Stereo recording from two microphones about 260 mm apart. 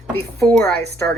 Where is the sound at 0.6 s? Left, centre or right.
Right.